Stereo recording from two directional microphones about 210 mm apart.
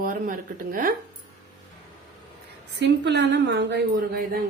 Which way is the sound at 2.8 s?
55° right (ahead or behind).